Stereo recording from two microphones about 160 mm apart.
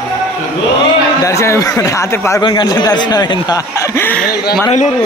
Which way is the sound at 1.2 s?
20° left (ahead or behind).